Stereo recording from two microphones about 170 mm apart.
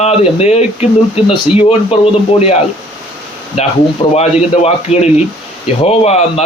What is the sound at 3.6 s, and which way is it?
Speech, 35° left (ahead or behind).